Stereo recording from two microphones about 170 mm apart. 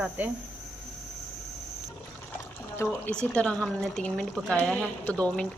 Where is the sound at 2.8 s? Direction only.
10° left (ahead or behind).